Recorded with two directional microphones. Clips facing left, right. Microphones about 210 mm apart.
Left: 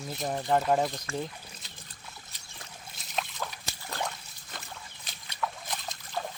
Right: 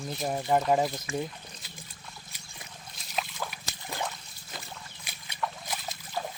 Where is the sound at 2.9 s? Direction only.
Centre (ahead or behind).